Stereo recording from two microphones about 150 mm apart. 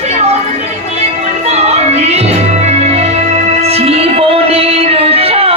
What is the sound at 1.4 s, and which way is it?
Music, 45° right (ahead or behind).